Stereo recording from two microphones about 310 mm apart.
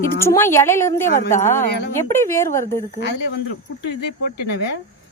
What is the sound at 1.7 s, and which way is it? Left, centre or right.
Speech, left.